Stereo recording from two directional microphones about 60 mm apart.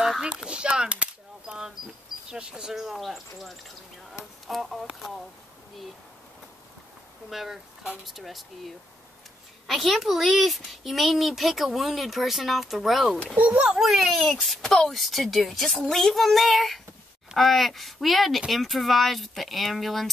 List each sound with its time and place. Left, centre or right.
0.2 s speech: centre
7.2 s speech: centre
13.4 s speech: centre
13.7 s speech: centre